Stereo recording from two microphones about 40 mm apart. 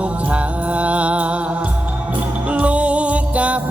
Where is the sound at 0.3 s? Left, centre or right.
Right.